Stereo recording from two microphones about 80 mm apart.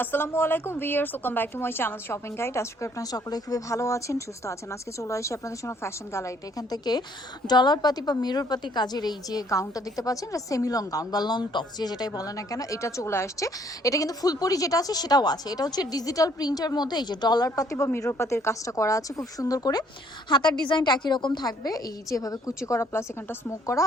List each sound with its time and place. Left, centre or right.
0.0 s speech: left
3.0 s speech: left
6.6 s a woman's voice: left
9.5 s a woman's voice: left
17.5 s a woman's voice: left
20.3 s a woman's voice: left